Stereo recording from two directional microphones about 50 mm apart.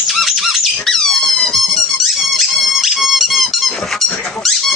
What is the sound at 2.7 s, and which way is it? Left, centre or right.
Dog, centre.